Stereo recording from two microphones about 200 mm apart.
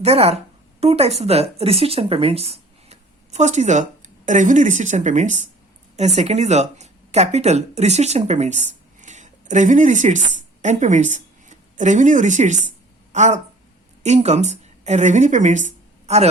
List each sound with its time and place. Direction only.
0.0 s a woman's voice: 30° right (ahead or behind)